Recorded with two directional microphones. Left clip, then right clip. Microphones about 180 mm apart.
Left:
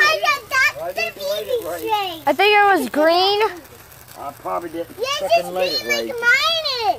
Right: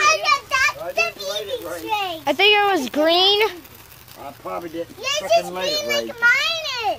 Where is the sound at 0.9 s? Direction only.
30° right (ahead or behind).